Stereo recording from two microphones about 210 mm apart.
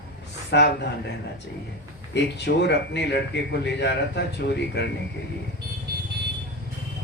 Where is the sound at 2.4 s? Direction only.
55° left (ahead or behind).